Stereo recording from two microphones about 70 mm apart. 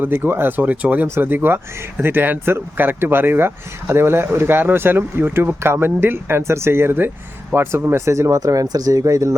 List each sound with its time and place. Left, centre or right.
0.0 s speech: right
1.0 s speech: right
8.4 s speech: right